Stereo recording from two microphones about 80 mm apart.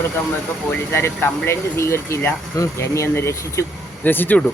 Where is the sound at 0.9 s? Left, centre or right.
Left.